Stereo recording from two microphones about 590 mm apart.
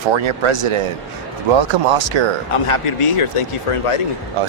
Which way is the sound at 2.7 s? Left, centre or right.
Left.